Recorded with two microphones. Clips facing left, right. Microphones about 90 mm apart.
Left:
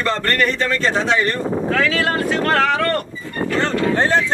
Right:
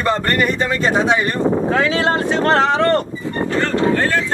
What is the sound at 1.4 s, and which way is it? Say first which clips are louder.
Wind noise: right 5 dB; 75° right (ahead or behind).